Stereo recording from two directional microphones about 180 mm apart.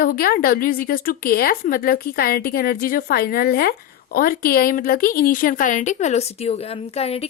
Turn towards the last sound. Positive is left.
turn(degrees=35)  # may be behind; listen again after turning